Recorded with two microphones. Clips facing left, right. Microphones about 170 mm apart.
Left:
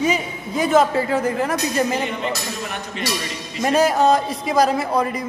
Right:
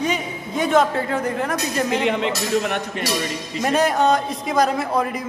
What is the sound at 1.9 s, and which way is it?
Speech, 90° right.